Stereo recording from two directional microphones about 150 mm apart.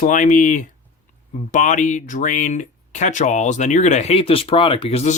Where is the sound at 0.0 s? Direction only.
60° left (ahead or behind).